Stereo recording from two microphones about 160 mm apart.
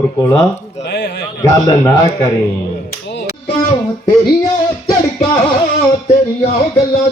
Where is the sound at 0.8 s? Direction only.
90° left.